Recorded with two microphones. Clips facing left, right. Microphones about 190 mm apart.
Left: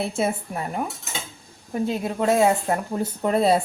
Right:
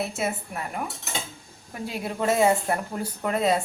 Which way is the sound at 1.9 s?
15° left (ahead or behind).